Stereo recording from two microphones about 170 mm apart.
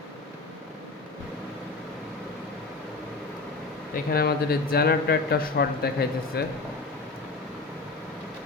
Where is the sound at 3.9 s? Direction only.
65° left (ahead or behind).